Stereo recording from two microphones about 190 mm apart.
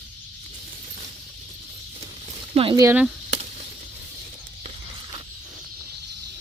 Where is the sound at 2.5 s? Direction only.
25° right (ahead or behind).